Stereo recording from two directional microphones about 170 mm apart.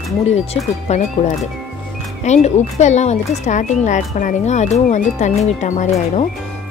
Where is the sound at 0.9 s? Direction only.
40° left (ahead or behind).